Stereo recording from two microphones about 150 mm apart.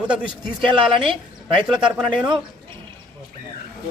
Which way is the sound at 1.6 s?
5° right (ahead or behind).